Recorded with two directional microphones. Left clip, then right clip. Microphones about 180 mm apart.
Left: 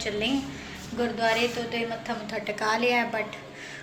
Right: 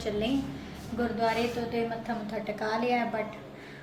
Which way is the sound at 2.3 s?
Centre (ahead or behind).